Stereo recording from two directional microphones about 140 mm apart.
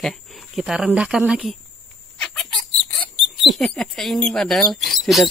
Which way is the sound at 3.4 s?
Centre (ahead or behind).